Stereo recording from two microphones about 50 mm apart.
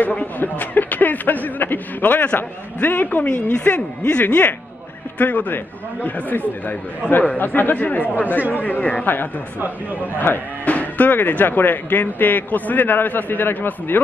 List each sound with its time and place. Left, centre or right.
0.0 s speech: left
0.4 s speech: left
4.3 s speech: left
8.4 s a man's voice: right
8.6 s speech: left
9.0 s speech: left
10.6 s speech: left